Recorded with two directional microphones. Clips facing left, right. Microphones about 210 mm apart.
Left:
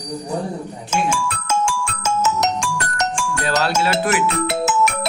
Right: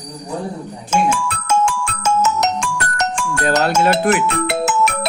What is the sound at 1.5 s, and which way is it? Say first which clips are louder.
Music: right 4 dB; 60° right (ahead or behind).